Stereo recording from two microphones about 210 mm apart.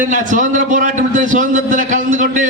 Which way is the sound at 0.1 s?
40° right (ahead or behind).